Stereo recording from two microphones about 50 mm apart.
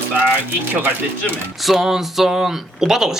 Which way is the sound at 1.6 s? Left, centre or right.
Centre.